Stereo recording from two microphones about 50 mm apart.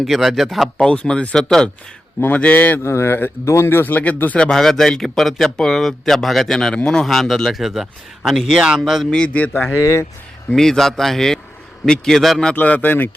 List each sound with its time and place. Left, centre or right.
0.0 s speech: centre
1.0 s speech: left
2.3 s speech: left
2.8 s speech: left
3.9 s speech: left
4.4 s speech: centre
9.0 s speech: centre
9.7 s speech: left
10.5 s speech: centre
12.5 s speech: left